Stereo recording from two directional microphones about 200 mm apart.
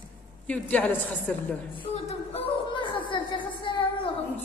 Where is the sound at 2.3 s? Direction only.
25° left (ahead or behind).